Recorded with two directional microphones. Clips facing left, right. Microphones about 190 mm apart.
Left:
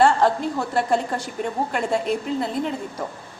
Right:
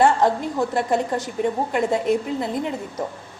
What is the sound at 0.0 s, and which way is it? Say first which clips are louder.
A woman's voice: even; 20° right (ahead or behind).